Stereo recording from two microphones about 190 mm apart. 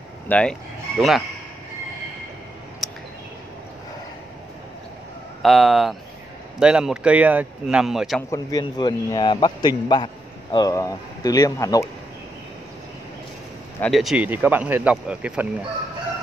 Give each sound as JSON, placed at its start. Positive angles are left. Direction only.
{"t": 0.3, "sound": "speech", "side_deg": 5}
{"t": 2.8, "sound": "a sound", "side_deg": 0}
{"t": 5.4, "sound": "speech", "side_deg": 0}
{"t": 8.3, "sound": "a man's voice", "side_deg": 20}
{"t": 13.7, "sound": "speech", "side_deg": 0}